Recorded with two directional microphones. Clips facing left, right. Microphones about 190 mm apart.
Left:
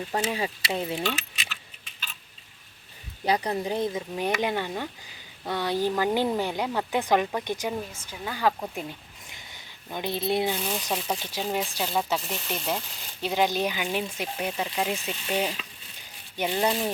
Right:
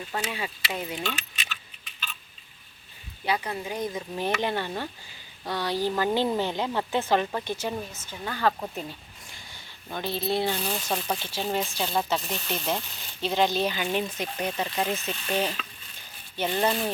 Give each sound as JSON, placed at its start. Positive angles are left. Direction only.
{"t": 0.1, "sound": "speech", "side_deg": 35}
{"t": 3.2, "sound": "speech", "side_deg": 35}
{"t": 4.1, "sound": "speech", "side_deg": 15}